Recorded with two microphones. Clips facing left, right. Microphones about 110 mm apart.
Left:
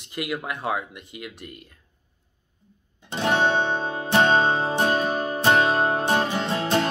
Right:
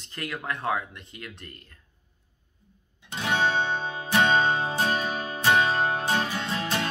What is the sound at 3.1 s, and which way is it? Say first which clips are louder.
Music: left 5 dB; 35° left (ahead or behind).